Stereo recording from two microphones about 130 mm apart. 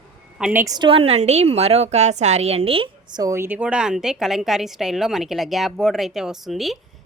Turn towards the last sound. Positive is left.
turn(degrees=0)  # may be behind; listen again after turning